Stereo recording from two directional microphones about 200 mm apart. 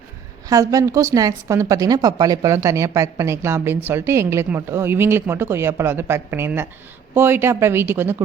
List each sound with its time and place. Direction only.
0.4 s a woman's voice: 15° right (ahead or behind)